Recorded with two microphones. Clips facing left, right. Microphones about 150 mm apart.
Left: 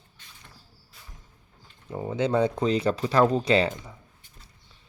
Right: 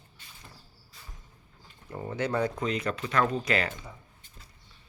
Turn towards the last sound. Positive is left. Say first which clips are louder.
# left 7 dB
turn(degrees=30)  # may be behind; listen again after turning